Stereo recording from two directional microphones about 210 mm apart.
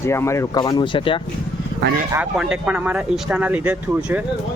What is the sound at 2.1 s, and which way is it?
Speech, 5° right (ahead or behind).